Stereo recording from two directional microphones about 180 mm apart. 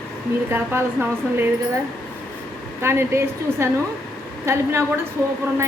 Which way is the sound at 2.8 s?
15° right (ahead or behind).